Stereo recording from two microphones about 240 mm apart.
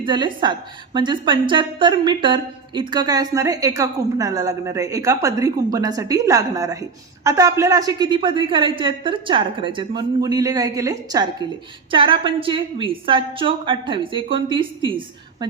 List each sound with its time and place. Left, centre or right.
0.0 s a woman's voice: centre